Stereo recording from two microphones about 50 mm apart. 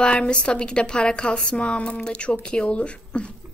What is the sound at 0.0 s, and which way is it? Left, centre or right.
A woman's voice, left.